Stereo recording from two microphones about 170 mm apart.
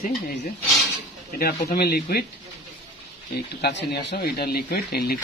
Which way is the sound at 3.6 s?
85° left.